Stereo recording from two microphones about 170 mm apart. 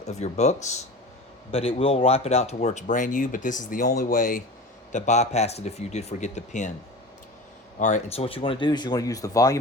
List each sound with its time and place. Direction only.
0.0 s speech: 40° left (ahead or behind)
7.8 s speech: 45° left (ahead or behind); by 9.6 s 20° left (ahead or behind)